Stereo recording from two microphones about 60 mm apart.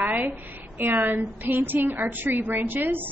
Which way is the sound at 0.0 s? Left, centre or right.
Right.